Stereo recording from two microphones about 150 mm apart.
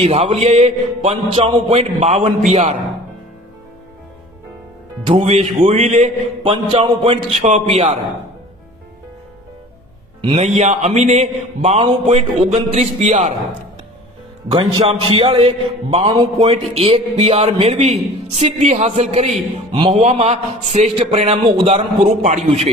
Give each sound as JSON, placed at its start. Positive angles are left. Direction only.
{"t": 0.0, "sound": "a man's voice", "side_deg": -45}
{"t": 5.0, "sound": "a man's voice", "side_deg": -45}
{"t": 10.2, "sound": "a man's voice", "side_deg": -35}
{"t": 10.4, "sound": "a man's voice", "side_deg": -50}
{"t": 14.5, "sound": "a man's voice", "side_deg": -30}
{"t": 21.7, "sound": "a man's voice", "side_deg": -50}